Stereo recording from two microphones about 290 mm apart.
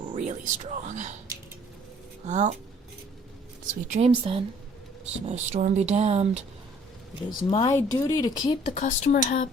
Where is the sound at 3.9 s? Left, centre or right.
Centre.